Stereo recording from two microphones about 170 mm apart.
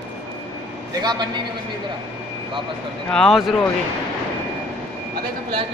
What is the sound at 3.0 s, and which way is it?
Speech, 5° left (ahead or behind).